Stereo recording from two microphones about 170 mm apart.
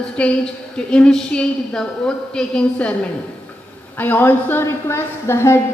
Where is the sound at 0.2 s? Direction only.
5° left (ahead or behind).